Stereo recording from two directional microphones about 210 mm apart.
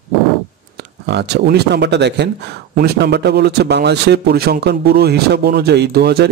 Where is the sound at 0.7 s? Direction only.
55° right (ahead or behind).